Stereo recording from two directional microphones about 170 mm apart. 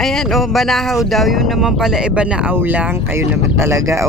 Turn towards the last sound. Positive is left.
turn(degrees=-20)  # may be behind; listen again after turning